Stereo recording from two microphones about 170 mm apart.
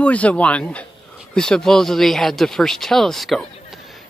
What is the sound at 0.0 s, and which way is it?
Speech, 10° left (ahead or behind).